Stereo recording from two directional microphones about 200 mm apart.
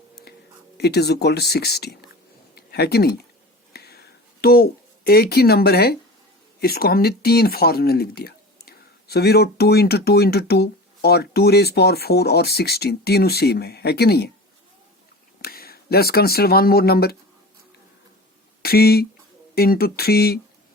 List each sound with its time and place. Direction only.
0.8 s speech: 55° left (ahead or behind)
3.7 s a sound: 50° left (ahead or behind)
6.6 s speech: 50° left (ahead or behind)
15.4 s speech: 50° left (ahead or behind)
18.6 s speech: 50° left (ahead or behind)